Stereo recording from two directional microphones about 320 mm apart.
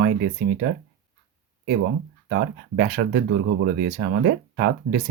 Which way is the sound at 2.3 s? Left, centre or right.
Right.